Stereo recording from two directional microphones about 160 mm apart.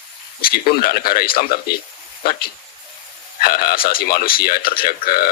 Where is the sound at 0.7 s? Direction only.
65° left (ahead or behind).